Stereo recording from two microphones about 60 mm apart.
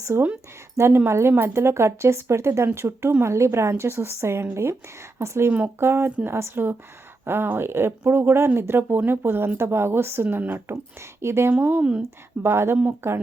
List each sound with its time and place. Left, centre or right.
0.1 s a woman's voice: right
5.5 s speech: right
5.8 s a woman's voice: right
10.2 s speech: right
11.2 s a woman's voice: right
11.8 s speech: centre
12.4 s a woman's voice: right